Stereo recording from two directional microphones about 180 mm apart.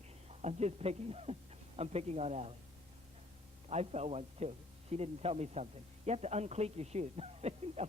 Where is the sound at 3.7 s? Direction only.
35° right (ahead or behind).